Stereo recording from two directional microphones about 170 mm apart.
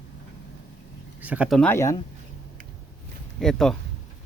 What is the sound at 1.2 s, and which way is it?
Speech, 10° right (ahead or behind).